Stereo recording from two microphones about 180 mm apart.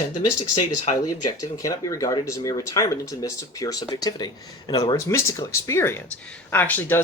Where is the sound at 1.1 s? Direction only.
20° left (ahead or behind).